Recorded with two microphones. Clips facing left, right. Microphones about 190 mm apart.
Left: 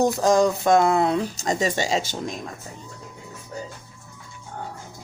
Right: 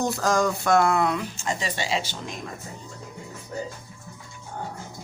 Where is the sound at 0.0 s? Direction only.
15° left (ahead or behind); by 2.3 s 45° left (ahead or behind).